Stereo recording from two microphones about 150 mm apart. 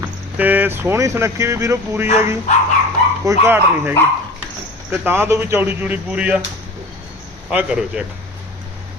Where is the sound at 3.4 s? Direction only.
15° right (ahead or behind).